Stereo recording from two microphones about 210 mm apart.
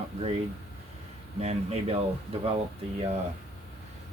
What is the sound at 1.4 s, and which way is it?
Speech, 30° right (ahead or behind).